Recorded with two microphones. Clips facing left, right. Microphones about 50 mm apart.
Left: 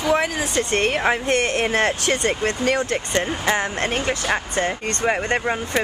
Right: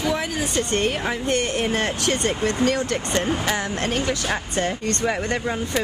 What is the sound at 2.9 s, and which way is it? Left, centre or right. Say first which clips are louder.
Speech: even; left.